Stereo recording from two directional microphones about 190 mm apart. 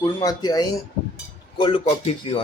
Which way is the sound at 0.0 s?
20° left (ahead or behind).